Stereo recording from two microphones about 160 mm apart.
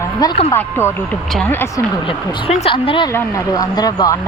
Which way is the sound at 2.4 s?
40° left (ahead or behind).